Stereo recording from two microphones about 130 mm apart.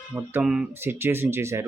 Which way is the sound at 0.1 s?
15° right (ahead or behind).